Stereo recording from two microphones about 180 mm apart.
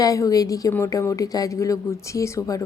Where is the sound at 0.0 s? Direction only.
20° left (ahead or behind).